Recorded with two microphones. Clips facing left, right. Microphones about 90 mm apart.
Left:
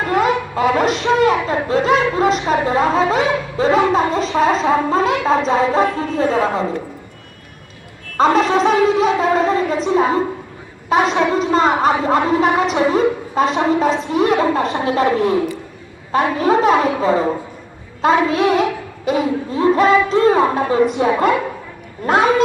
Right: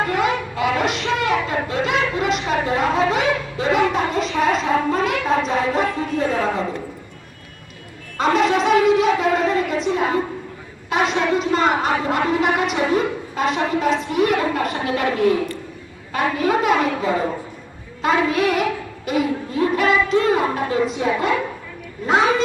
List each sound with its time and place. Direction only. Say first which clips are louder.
0.1 s speech: left 4 dB; 40° left (ahead or behind)
8.2 s speech: left 4 dB; 35° left (ahead or behind)
20.8 s a woman's voice: left 5 dB; 50° left (ahead or behind)